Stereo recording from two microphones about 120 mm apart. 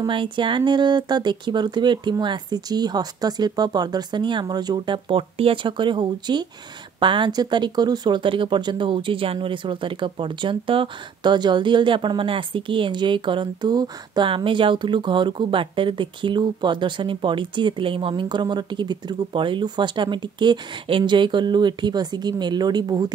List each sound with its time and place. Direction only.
0.0 s speech: 45° right (ahead or behind)